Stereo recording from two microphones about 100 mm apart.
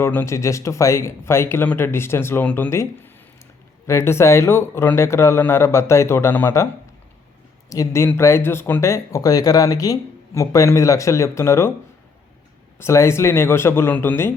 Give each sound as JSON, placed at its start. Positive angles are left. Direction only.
{"t": 0.0, "sound": "speech", "side_deg": 20}
{"t": 7.7, "sound": "speech", "side_deg": 35}
{"t": 12.8, "sound": "speech", "side_deg": 25}